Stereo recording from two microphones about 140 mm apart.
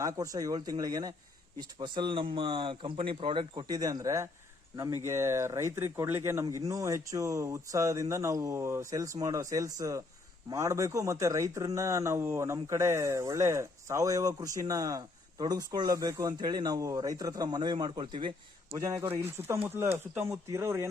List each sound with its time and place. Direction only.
0.0 s speech: 25° right (ahead or behind)